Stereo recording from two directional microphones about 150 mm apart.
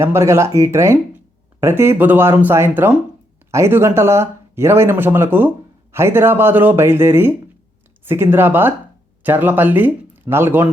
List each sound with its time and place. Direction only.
0.0 s speech: 15° right (ahead or behind)